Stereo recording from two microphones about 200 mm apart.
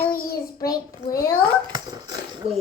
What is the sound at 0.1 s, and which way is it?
Child singing, 50° left (ahead or behind).